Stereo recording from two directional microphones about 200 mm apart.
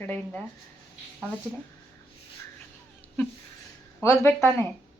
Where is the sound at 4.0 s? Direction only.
10° left (ahead or behind).